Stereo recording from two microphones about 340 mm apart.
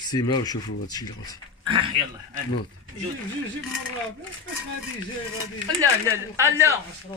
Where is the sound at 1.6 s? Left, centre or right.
Centre.